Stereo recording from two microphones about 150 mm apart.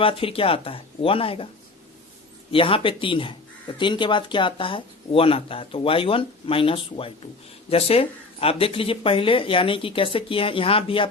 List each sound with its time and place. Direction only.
0.0 s speech: 35° left (ahead or behind)
2.5 s speech: 35° left (ahead or behind)